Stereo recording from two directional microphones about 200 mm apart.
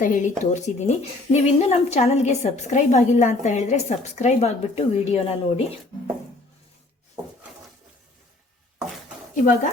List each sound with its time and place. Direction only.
0.0 s speech: 40° left (ahead or behind)